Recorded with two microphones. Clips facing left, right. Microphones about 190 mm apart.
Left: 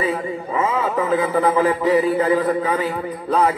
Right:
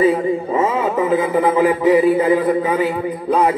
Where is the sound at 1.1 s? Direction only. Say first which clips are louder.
Right 1 dB; 15° right (ahead or behind).